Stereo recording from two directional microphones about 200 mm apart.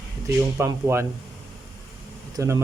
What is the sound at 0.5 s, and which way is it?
Speech, 10° right (ahead or behind).